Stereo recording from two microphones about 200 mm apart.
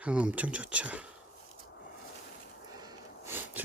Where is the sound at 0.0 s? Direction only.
5° right (ahead or behind).